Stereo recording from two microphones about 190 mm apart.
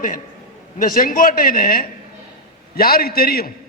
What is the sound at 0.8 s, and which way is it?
A woman's voice, 45° left (ahead or behind).